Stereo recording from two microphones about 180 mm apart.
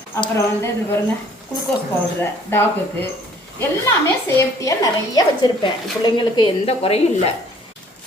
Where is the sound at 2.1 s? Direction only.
10° left (ahead or behind).